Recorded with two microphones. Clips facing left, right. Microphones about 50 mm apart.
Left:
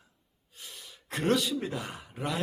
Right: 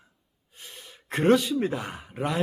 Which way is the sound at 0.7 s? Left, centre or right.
Right.